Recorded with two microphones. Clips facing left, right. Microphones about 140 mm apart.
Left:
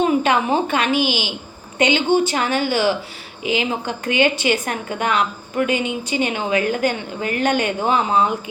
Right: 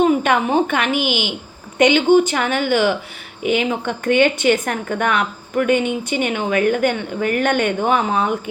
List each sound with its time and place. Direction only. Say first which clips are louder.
0.0 s speech: right 2 dB; 50° right (ahead or behind)